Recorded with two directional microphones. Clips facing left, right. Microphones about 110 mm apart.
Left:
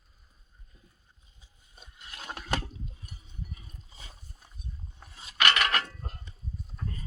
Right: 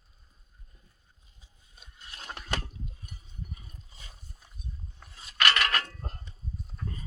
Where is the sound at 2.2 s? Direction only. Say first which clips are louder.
Left 3 dB; 25° left (ahead or behind).